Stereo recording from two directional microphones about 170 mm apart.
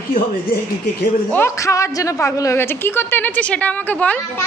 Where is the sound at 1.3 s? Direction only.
15° left (ahead or behind).